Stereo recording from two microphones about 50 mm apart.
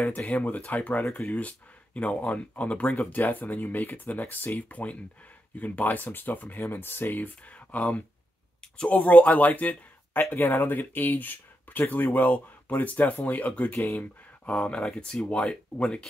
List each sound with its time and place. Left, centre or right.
0.0 s speech: left
7.5 s speech: left